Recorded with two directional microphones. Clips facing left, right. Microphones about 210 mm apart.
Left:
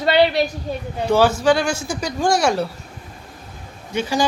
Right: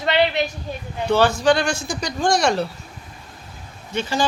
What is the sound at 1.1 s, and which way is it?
Speech, 10° left (ahead or behind).